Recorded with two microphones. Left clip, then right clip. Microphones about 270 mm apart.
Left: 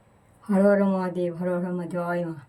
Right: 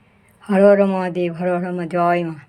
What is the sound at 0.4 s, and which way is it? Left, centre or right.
Speech, right.